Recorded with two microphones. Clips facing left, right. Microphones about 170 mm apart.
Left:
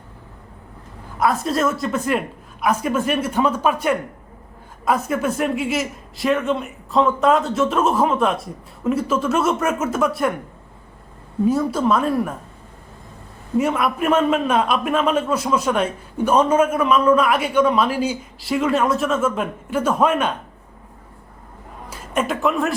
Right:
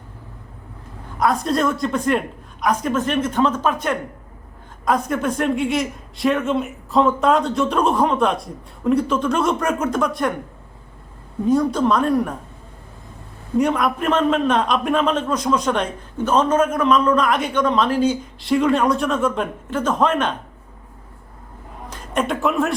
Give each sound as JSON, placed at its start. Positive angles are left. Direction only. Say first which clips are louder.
{"t": 1.2, "sound": "a man's voice", "louder": "even", "side_deg": 5}
{"t": 11.4, "sound": "a woman's voice", "louder": "right 1 dB", "side_deg": 5}
{"t": 13.6, "sound": "a man's voice", "louder": "right 1 dB", "side_deg": 5}
{"t": 21.8, "sound": "speech", "louder": "even", "side_deg": 5}